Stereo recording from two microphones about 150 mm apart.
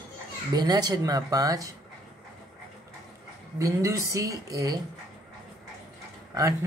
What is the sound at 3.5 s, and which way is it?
Speech, 20° right (ahead or behind).